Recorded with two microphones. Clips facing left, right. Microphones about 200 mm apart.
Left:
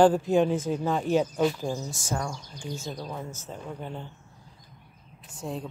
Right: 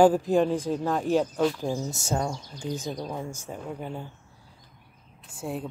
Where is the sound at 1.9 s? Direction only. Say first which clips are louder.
Right 3 dB; 25° right (ahead or behind).